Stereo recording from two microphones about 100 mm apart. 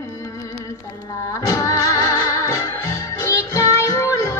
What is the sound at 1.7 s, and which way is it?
Music, 35° left (ahead or behind).